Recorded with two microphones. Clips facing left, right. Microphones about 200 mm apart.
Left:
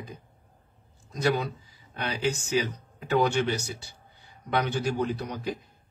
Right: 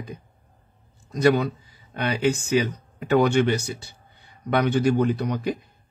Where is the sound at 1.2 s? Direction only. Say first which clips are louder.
Right 7 dB; 60° right (ahead or behind).